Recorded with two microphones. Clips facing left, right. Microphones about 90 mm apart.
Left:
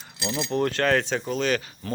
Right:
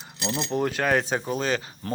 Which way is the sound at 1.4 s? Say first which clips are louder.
Left 1 dB; 30° right (ahead or behind).